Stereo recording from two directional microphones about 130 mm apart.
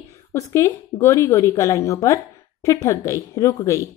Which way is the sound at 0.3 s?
20° left (ahead or behind).